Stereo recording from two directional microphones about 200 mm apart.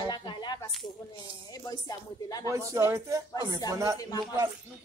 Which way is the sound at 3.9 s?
20° left (ahead or behind).